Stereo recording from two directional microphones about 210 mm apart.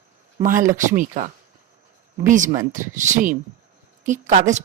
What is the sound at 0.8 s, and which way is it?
Speech, 35° right (ahead or behind).